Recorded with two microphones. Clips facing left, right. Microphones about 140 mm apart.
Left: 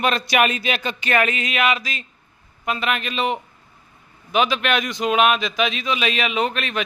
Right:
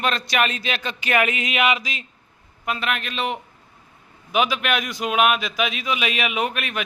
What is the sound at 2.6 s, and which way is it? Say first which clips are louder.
Speech: left 2 dB; centre (ahead or behind).